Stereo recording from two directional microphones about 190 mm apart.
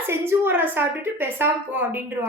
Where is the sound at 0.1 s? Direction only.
10° right (ahead or behind).